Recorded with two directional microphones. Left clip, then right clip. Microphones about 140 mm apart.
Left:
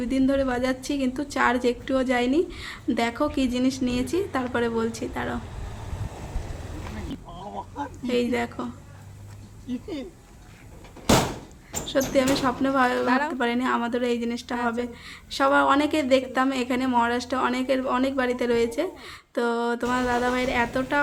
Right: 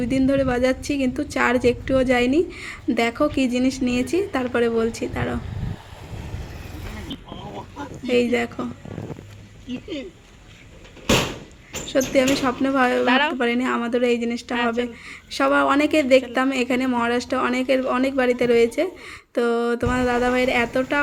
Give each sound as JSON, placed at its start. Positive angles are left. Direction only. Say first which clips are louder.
{"t": 0.0, "sound": "a woman's voice", "louder": "right 3 dB", "side_deg": -20}
{"t": 8.0, "sound": "a woman's voice", "louder": "right 5 dB", "side_deg": -20}
{"t": 11.9, "sound": "speech", "louder": "right 3 dB", "side_deg": -20}
{"t": 13.1, "sound": "speech", "louder": "right 5 dB", "side_deg": 0}
{"t": 13.3, "sound": "a woman's voice", "louder": "right 3 dB", "side_deg": -15}